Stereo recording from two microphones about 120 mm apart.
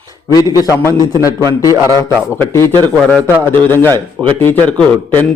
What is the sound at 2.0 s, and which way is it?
Speech, 25° left (ahead or behind).